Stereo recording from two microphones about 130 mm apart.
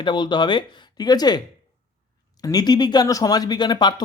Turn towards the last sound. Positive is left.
turn(degrees=35)  # may be behind; listen again after turning